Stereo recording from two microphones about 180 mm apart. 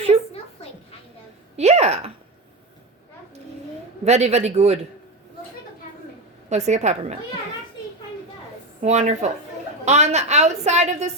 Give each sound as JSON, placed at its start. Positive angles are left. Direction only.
{"t": 1.5, "sound": "a sound", "side_deg": -35}
{"t": 4.0, "sound": "a woman's voice", "side_deg": -35}
{"t": 6.5, "sound": "a woman's voice", "side_deg": -40}
{"t": 8.8, "sound": "a woman's voice", "side_deg": -35}